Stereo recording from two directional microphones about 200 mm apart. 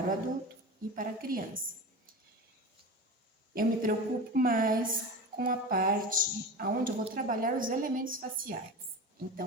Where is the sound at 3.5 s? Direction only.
45° right (ahead or behind).